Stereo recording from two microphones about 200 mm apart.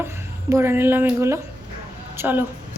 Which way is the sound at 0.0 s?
10° right (ahead or behind).